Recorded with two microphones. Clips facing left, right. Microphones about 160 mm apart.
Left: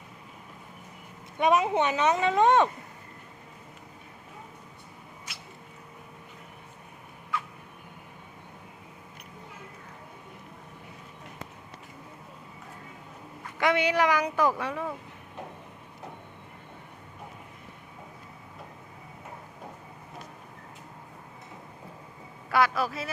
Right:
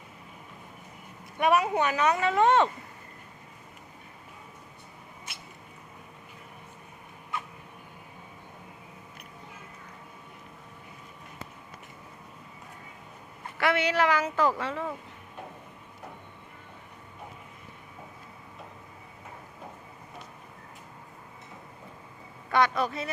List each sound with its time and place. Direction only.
1.4 s speech: 20° left (ahead or behind)
13.6 s speech: 15° left (ahead or behind)
22.4 s a woman's voice: 5° left (ahead or behind)